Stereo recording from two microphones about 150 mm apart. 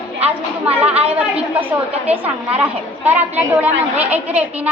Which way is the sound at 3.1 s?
10° right (ahead or behind).